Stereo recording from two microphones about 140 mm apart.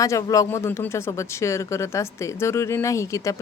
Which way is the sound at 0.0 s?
25° left (ahead or behind).